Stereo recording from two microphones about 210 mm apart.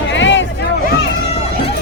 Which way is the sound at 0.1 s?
60° left (ahead or behind).